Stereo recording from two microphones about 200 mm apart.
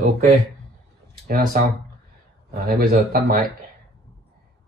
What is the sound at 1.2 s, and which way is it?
Speech, 45° right (ahead or behind).